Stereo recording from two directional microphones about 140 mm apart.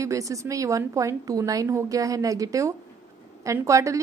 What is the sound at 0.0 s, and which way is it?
A woman's voice, 25° right (ahead or behind).